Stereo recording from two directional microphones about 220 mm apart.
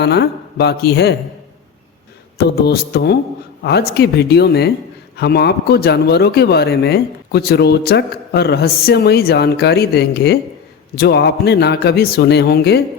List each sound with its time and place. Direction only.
0.0 s speech: 45° left (ahead or behind)
2.4 s speech: 45° left (ahead or behind)